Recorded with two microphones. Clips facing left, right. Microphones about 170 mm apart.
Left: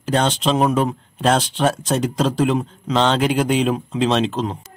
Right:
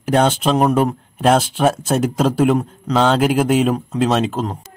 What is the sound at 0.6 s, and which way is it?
Speech, 5° right (ahead or behind).